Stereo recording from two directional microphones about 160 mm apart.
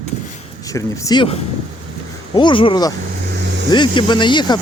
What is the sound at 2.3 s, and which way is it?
Speech, 30° left (ahead or behind).